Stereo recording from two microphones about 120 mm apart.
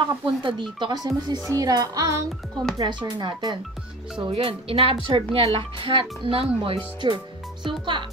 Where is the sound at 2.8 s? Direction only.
40° right (ahead or behind).